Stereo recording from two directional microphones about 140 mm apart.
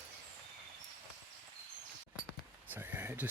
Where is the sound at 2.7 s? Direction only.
10° right (ahead or behind).